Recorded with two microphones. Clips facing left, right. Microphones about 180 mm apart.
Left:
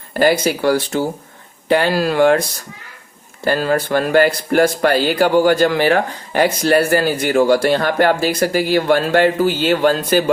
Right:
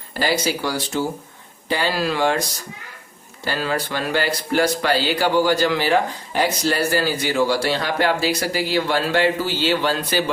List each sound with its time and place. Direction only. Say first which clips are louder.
0.2 s speech: left 7 dB; 50° left (ahead or behind)
3.4 s speech: left 7 dB; 50° left (ahead or behind)